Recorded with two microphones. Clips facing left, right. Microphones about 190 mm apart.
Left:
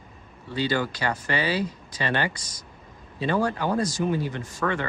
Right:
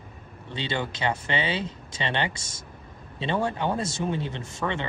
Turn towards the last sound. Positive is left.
turn(degrees=-25)  # may be behind; listen again after turning